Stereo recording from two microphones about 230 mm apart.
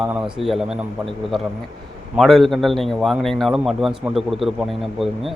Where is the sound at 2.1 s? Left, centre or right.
Centre.